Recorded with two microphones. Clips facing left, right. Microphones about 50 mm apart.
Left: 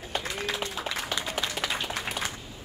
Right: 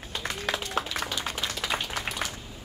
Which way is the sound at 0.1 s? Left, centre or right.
Left.